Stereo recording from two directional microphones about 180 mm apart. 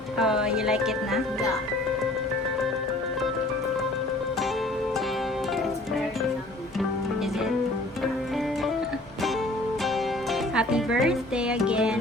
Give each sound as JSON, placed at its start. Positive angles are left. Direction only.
{"t": 0.2, "sound": "speech", "side_deg": -5}
{"t": 10.5, "sound": "speech", "side_deg": -5}